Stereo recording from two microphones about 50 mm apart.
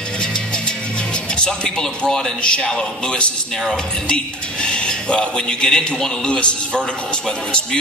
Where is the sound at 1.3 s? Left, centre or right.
Centre.